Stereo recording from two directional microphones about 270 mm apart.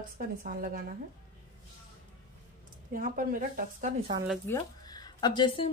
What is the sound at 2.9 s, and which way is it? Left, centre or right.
A woman's voice, right.